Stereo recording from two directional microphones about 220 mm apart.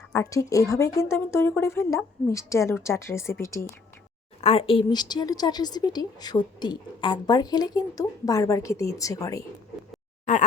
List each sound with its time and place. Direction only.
0.1 s a woman's voice: 15° left (ahead or behind)
4.4 s a woman's voice: 25° left (ahead or behind)